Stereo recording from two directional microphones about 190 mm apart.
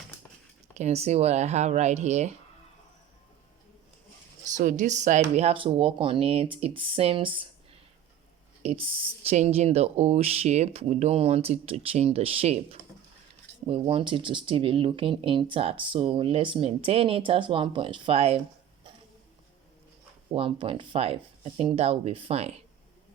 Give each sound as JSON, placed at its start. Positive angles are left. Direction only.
{"t": 0.7, "sound": "speech", "side_deg": -35}
{"t": 4.5, "sound": "speech", "side_deg": -40}
{"t": 8.6, "sound": "speech", "side_deg": -30}
{"t": 20.3, "sound": "speech", "side_deg": -30}